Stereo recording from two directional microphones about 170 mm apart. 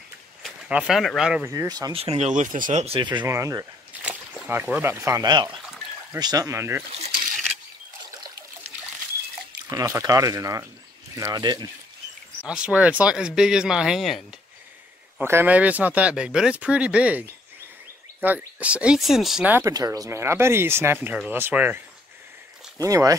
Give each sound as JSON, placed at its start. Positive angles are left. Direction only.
{"t": 0.4, "sound": "speech", "side_deg": -5}
{"t": 1.4, "sound": "speech", "side_deg": -15}
{"t": 9.7, "sound": "speech", "side_deg": -20}
{"t": 12.4, "sound": "speech", "side_deg": -5}
{"t": 15.1, "sound": "speech", "side_deg": -10}
{"t": 19.6, "sound": "speech", "side_deg": -20}